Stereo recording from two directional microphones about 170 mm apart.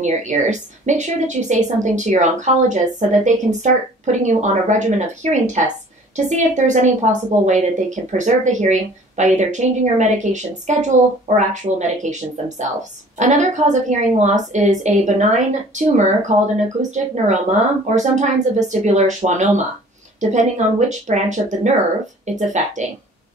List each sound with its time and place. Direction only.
0.0 s a woman's voice: 45° right (ahead or behind)